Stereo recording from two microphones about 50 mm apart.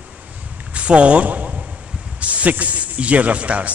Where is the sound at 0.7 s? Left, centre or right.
Right.